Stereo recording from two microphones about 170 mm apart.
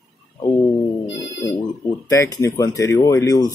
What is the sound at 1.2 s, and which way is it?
Speech, 20° left (ahead or behind).